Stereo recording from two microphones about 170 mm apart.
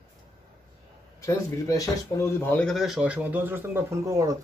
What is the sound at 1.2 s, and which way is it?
Speech, 20° left (ahead or behind).